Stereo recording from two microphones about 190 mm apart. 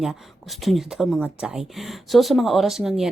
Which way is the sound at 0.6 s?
Centre (ahead or behind).